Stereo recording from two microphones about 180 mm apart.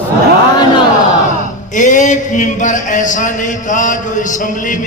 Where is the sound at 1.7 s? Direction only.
45° left (ahead or behind).